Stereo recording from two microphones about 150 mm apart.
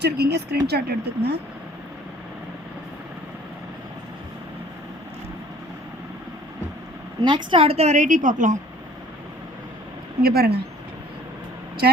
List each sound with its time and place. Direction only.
0.0 s speech: 90° right
7.2 s a woman's voice: 30° right (ahead or behind); by 8.5 s 55° right (ahead or behind)
10.2 s speech: 90° right
11.8 s speech: 90° right